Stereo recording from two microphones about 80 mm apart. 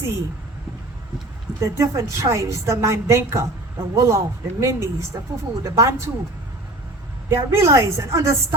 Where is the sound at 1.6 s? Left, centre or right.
Right.